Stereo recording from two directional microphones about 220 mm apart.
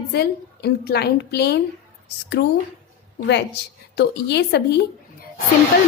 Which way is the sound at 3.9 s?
50° left (ahead or behind).